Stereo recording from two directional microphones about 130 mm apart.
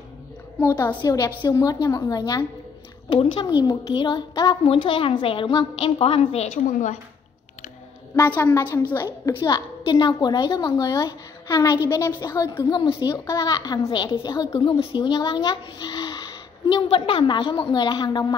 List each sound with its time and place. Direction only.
0.6 s a child's voice: 25° left (ahead or behind)
3.1 s a child's voice: 40° left (ahead or behind)
8.3 s a woman's voice: 15° left (ahead or behind); by 18.2 s 35° left (ahead or behind)